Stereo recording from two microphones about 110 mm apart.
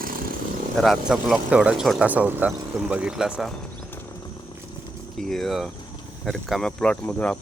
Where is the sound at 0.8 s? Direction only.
Centre (ahead or behind).